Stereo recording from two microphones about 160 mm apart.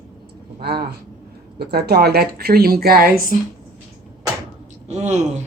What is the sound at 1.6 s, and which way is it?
Speech, 85° right.